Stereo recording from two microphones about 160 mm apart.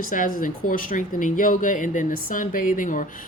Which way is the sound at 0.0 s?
60° left (ahead or behind).